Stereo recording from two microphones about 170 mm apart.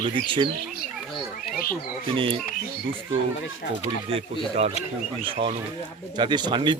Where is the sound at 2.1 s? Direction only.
30° right (ahead or behind).